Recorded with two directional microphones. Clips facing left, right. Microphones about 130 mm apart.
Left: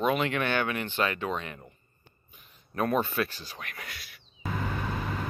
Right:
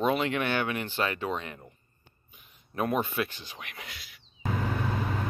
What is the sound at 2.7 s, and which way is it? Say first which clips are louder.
Speech: left 1 dB; 15° right (ahead or behind).